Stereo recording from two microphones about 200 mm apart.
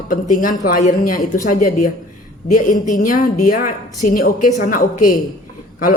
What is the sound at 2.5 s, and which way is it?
Speech, 40° left (ahead or behind).